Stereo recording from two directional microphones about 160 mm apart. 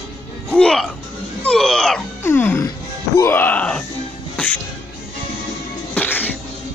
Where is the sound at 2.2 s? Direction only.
15° left (ahead or behind).